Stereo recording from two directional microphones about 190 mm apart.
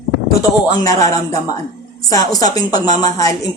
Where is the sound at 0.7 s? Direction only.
20° left (ahead or behind).